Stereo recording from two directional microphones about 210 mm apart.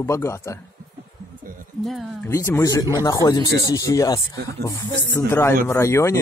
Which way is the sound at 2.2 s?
15° left (ahead or behind).